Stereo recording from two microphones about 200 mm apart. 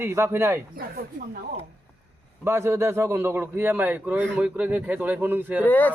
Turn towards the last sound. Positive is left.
turn(degrees=10)  # may be behind; listen again after turning